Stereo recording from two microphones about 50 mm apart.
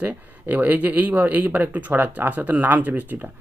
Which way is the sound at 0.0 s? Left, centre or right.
Right.